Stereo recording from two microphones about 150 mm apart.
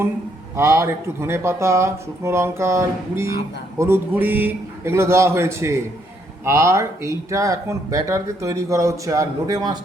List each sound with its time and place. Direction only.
0.5 s speech: 15° right (ahead or behind)